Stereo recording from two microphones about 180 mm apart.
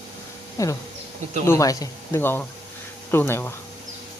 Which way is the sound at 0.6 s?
20° left (ahead or behind).